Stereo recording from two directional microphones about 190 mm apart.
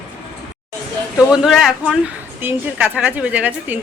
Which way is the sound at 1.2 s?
5° right (ahead or behind).